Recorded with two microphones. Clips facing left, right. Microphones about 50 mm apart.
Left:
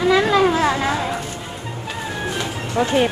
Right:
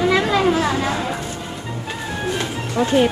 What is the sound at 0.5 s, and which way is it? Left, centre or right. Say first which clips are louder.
Speech: left 1 dB; left.